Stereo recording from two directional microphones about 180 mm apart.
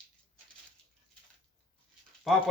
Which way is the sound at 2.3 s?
Centre (ahead or behind).